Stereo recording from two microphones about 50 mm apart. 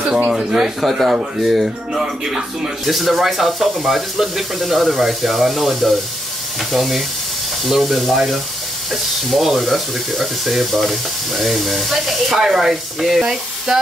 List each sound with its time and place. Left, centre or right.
0.3 s speech: centre
13.2 s speech: centre